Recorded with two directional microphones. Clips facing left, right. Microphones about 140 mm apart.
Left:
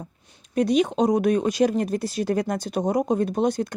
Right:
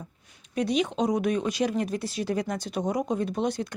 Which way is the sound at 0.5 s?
45° left (ahead or behind).